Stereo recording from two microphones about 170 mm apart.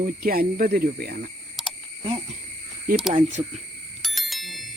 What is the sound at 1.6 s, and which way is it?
Wild animals, centre (ahead or behind).